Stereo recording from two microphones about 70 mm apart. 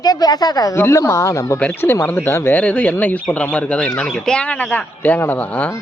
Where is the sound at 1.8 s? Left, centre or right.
Left.